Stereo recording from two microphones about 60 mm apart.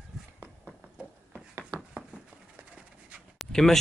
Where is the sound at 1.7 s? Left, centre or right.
Right.